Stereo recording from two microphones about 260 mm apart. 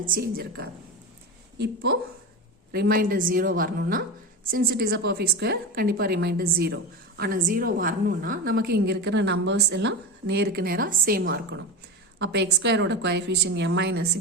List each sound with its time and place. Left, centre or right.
0.0 s a woman's voice: right